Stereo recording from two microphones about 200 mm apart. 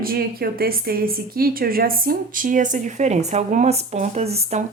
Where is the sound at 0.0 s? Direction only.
50° right (ahead or behind).